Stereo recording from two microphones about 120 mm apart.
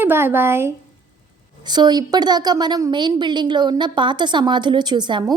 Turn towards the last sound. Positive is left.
turn(degrees=-40)  # may be behind; listen again after turning